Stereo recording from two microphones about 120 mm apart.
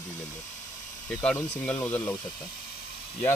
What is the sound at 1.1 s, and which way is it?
Speech, 5° left (ahead or behind).